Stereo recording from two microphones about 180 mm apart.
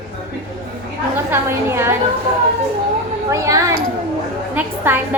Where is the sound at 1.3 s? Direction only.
15° right (ahead or behind).